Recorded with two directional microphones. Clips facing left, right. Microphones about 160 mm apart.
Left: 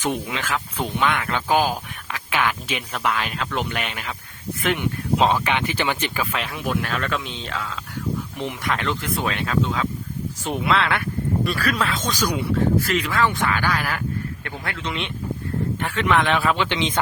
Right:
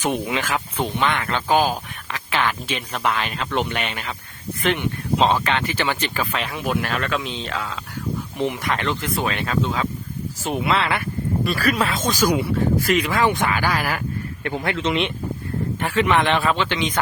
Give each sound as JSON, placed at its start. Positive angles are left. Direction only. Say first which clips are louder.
{"t": 0.0, "sound": "speech", "louder": "right 2 dB", "side_deg": -15}
{"t": 0.8, "sound": "speech", "louder": "even", "side_deg": 0}
{"t": 5.2, "sound": "speech", "louder": "right 1 dB", "side_deg": 10}
{"t": 6.3, "sound": "speech", "louder": "right 1 dB", "side_deg": 0}
{"t": 15.8, "sound": "speech", "louder": "right 2 dB", "side_deg": -5}
{"t": 16.6, "sound": "speech", "louder": "even", "side_deg": 20}